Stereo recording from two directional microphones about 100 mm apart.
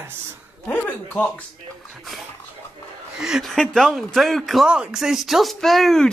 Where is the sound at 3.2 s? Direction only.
5° right (ahead or behind).